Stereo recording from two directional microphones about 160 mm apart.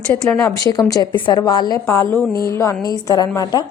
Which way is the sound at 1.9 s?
15° left (ahead or behind).